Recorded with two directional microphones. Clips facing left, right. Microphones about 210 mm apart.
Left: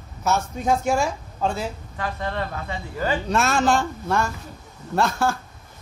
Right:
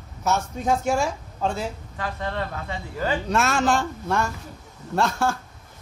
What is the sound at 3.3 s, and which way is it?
Speech, 35° left (ahead or behind).